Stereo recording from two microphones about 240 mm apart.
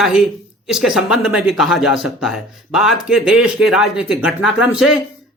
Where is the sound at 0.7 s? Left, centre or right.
Centre.